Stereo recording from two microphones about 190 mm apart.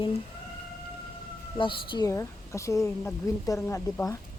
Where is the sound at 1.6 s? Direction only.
25° left (ahead or behind).